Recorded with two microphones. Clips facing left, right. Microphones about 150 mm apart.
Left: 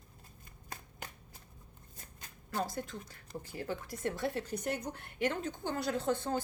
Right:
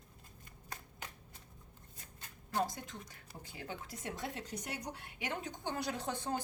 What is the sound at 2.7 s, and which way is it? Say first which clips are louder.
A woman's voice: left 7 dB; 20° right (ahead or behind).